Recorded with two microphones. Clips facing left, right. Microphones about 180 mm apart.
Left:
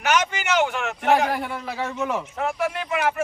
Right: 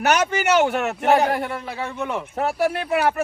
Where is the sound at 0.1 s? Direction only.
40° right (ahead or behind).